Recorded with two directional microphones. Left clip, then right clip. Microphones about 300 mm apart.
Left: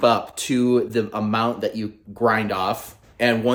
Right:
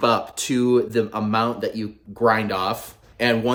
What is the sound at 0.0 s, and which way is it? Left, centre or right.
Speech, centre.